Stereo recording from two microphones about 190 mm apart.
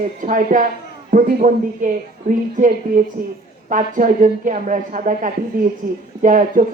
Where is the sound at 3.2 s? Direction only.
45° right (ahead or behind).